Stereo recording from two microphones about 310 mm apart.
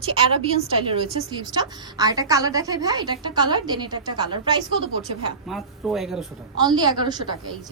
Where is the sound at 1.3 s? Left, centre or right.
Centre.